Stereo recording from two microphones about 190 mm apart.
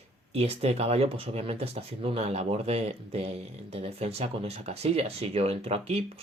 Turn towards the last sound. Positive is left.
turn(degrees=-35)  # may be behind; listen again after turning